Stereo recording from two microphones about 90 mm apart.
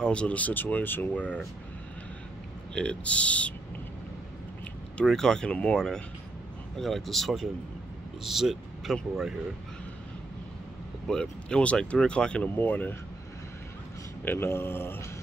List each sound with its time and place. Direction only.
0.0 s speech: 10° left (ahead or behind)
2.7 s speech: 10° left (ahead or behind)
5.0 s speech: 5° left (ahead or behind)
11.1 s speech: 10° left (ahead or behind)
12.5 s speech: 20° left (ahead or behind)
14.2 s speech: 25° left (ahead or behind)